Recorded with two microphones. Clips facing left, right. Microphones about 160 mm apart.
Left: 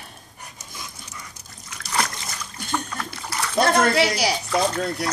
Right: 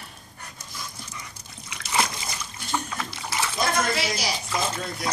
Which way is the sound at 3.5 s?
60° left (ahead or behind).